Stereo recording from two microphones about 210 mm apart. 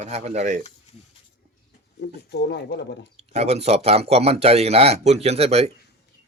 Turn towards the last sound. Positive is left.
turn(degrees=-30)  # may be behind; listen again after turning